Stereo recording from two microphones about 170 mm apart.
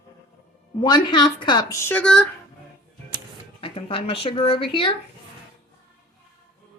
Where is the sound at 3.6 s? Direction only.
30° left (ahead or behind).